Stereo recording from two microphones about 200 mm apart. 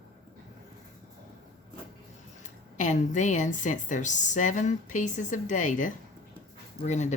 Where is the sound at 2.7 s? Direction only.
40° left (ahead or behind).